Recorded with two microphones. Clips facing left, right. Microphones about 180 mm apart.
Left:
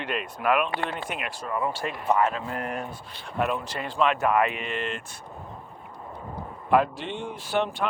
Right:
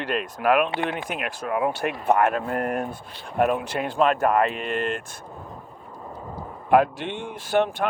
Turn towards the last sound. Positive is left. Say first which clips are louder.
# right 4 dB
turn(degrees=-45)  # may be behind; listen again after turning